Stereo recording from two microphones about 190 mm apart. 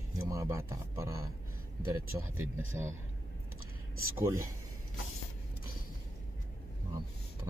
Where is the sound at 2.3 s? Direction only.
10° right (ahead or behind).